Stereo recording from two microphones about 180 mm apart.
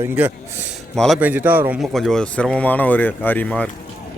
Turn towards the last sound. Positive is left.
turn(degrees=5)  # may be behind; listen again after turning